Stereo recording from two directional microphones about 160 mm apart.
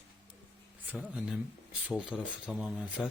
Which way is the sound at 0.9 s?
5° right (ahead or behind).